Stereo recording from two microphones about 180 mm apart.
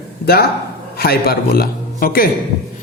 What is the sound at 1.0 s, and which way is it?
A man's voice, 55° left (ahead or behind).